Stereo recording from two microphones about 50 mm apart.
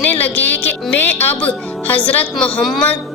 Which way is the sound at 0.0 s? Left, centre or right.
Left.